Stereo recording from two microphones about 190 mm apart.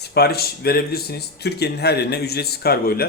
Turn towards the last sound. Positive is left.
turn(degrees=55)  # may be behind; listen again after turning